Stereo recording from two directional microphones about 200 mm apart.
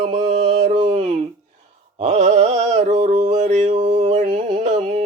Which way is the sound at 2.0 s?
35° right (ahead or behind).